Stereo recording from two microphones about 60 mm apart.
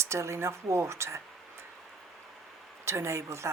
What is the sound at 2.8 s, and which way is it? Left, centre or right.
Speech, right.